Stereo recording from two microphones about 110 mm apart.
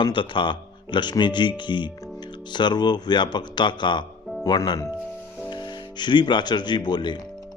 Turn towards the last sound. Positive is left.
turn(degrees=45)  # may be behind; listen again after turning